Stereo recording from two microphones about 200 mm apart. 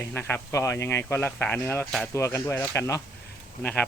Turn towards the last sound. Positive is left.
turn(degrees=10)  # may be behind; listen again after turning